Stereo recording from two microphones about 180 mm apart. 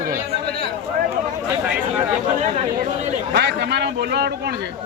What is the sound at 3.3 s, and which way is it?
A man's voice, 70° right (ahead or behind).